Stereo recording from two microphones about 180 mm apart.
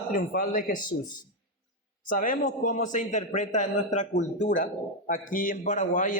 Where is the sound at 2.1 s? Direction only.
50° left (ahead or behind).